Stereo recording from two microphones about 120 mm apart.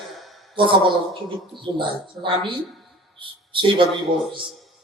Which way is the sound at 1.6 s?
45° right (ahead or behind).